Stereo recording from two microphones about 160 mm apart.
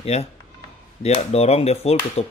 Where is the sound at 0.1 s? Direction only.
40° left (ahead or behind).